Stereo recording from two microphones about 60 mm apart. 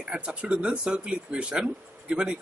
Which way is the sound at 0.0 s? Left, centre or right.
Centre.